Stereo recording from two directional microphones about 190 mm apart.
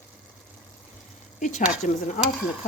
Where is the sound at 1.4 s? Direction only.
40° left (ahead or behind).